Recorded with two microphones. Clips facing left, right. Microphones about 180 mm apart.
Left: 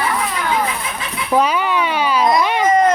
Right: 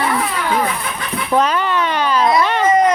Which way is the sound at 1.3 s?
10° left (ahead or behind).